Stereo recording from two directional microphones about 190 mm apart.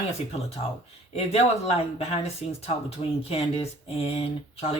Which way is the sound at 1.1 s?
35° left (ahead or behind).